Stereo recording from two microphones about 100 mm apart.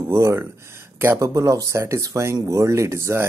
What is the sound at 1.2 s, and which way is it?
Speech, 30° right (ahead or behind).